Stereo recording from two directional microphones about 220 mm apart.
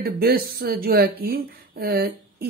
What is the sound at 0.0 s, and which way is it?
Speech, 45° right (ahead or behind).